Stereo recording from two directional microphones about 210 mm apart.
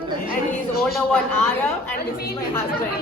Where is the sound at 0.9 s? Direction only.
5° left (ahead or behind).